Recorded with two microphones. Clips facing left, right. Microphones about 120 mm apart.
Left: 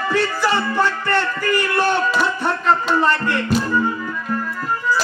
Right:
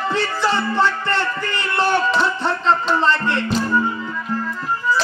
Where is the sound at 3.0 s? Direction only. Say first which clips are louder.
Even; 25° right (ahead or behind).